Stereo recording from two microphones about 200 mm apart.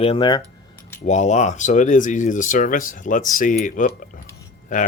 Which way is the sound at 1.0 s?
35° left (ahead or behind).